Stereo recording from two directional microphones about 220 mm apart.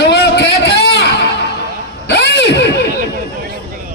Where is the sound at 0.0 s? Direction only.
50° left (ahead or behind).